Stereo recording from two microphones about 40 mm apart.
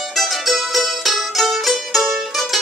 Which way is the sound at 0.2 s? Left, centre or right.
Centre.